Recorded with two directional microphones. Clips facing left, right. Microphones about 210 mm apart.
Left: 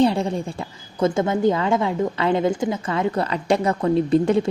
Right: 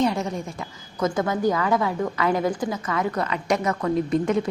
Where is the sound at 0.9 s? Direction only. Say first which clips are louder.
Left 4 dB; 25° left (ahead or behind).